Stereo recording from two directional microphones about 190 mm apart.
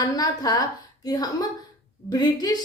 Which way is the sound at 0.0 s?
20° left (ahead or behind).